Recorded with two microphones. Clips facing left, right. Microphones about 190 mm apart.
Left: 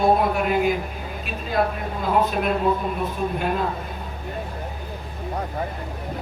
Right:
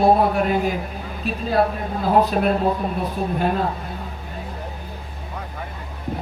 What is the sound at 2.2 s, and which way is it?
Speech, 35° right (ahead or behind).